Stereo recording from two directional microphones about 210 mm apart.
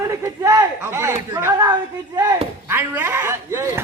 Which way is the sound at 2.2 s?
20° right (ahead or behind).